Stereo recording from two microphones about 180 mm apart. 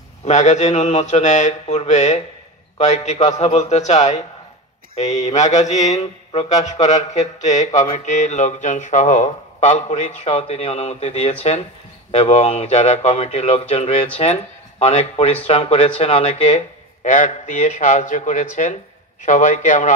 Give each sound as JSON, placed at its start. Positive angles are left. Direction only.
{"t": 0.2, "sound": "a man's voice", "side_deg": 40}